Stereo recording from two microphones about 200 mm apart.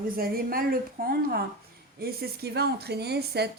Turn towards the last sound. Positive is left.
turn(degrees=-55)  # may be behind; listen again after turning